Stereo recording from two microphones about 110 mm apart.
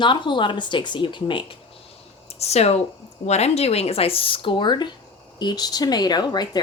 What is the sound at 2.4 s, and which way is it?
Speech, 70° left (ahead or behind).